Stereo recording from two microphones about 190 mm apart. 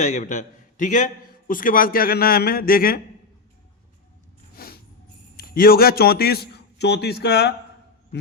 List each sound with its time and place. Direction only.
0.0 s a man's voice: 40° left (ahead or behind)
4.5 s a sound: 55° left (ahead or behind)
5.4 s a man's voice: 50° left (ahead or behind)